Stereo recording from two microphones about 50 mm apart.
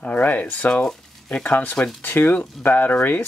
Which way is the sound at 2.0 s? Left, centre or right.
Left.